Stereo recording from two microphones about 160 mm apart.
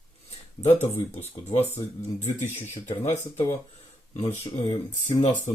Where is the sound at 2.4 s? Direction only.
15° left (ahead or behind).